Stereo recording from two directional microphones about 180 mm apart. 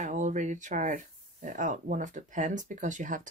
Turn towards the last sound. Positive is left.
turn(degrees=-45)  # may be behind; listen again after turning